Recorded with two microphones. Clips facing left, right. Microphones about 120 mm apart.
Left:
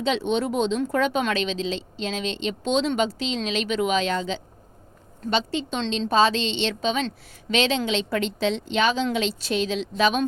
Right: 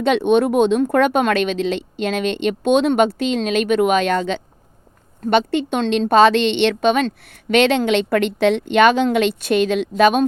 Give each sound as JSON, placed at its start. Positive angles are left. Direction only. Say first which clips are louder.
{"t": 0.0, "sound": "speech", "louder": "right 8 dB", "side_deg": -60}